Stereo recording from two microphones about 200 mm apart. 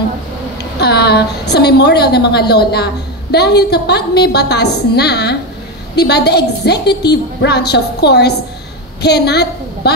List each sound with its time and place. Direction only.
0.6 s a woman's voice: 55° left (ahead or behind)